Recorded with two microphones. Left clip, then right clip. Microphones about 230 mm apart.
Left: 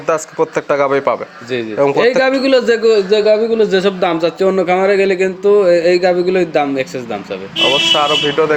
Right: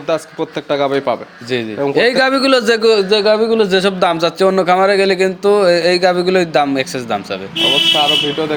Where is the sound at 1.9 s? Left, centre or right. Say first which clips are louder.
Right 2 dB; right.